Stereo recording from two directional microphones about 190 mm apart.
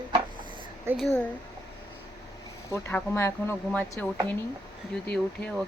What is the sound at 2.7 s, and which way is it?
A woman's voice, 15° left (ahead or behind).